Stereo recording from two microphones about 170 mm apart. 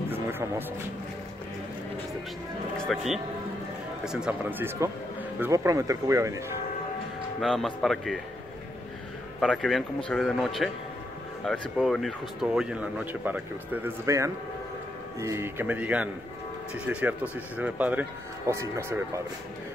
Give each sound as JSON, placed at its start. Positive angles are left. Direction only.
{"t": 0.1, "sound": "music", "side_deg": -10}
{"t": 2.9, "sound": "speech", "side_deg": 0}
{"t": 7.3, "sound": "speech", "side_deg": 0}
{"t": 9.4, "sound": "speech", "side_deg": 5}